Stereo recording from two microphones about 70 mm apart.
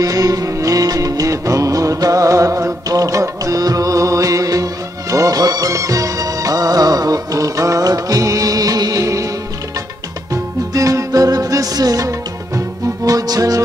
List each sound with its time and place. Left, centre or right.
0.0 s music: right
5.1 s music of bollywood: right
9.0 s music: right
10.3 s music: right